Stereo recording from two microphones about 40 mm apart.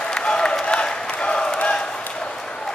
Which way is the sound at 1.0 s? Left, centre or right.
Left.